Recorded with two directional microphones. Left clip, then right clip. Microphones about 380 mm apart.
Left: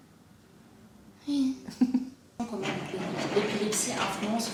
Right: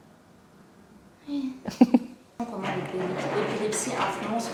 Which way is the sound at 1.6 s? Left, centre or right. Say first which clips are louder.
Right 8 dB; right.